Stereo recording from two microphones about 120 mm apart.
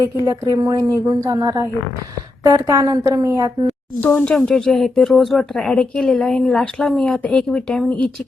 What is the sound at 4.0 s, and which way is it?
Speech, 10° left (ahead or behind).